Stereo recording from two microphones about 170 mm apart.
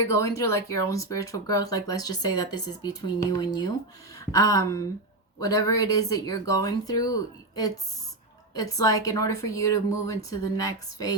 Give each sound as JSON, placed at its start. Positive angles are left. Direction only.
{"t": 0.0, "sound": "speech", "side_deg": 15}